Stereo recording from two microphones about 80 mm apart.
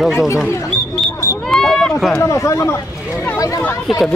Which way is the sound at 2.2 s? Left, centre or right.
Left.